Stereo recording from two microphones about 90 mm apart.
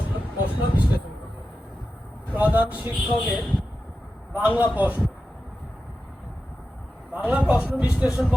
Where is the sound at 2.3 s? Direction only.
20° right (ahead or behind).